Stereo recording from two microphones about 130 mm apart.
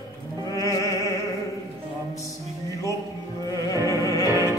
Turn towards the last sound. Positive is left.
turn(degrees=25)  # may be behind; listen again after turning